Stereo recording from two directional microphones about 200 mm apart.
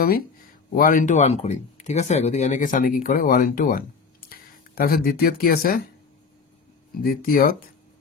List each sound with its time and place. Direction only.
0.7 s speech: 40° left (ahead or behind)
7.0 s speech: 45° left (ahead or behind)